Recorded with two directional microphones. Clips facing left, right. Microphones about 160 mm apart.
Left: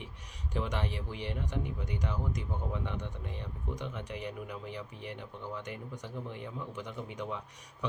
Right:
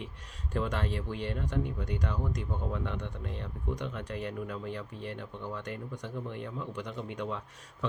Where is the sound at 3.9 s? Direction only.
15° left (ahead or behind).